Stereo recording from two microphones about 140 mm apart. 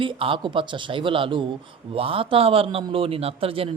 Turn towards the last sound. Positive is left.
turn(degrees=-45)  # may be behind; listen again after turning